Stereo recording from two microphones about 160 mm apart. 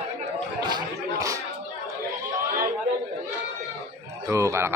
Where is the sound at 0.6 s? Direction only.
25° right (ahead or behind).